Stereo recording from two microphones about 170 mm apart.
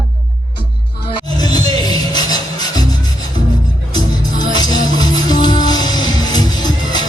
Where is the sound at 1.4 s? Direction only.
20° left (ahead or behind).